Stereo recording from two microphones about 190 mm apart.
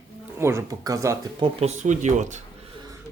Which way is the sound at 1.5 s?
35° right (ahead or behind).